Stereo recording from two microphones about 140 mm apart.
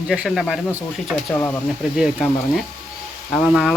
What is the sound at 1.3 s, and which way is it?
Speech, 15° left (ahead or behind).